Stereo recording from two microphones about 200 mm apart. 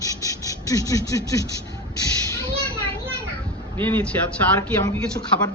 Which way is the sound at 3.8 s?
10° left (ahead or behind).